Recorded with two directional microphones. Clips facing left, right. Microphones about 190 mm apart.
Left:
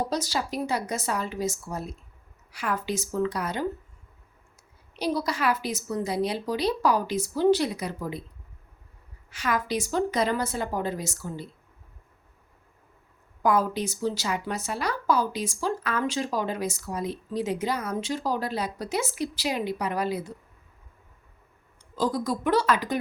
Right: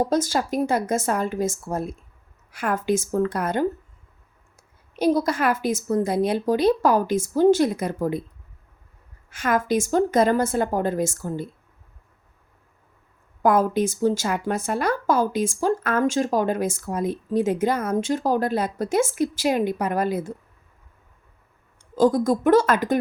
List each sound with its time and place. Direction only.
0.0 s speech: 50° right (ahead or behind)
4.9 s speech: 50° right (ahead or behind)
9.3 s speech: 50° right (ahead or behind)
13.4 s speech: 50° right (ahead or behind)
21.9 s speech: 50° right (ahead or behind)